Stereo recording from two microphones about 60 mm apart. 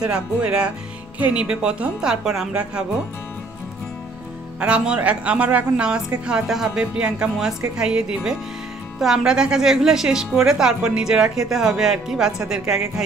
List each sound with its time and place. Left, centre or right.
0.0 s speech: centre
4.6 s speech: centre
6.4 s speech: centre
6.7 s speech: centre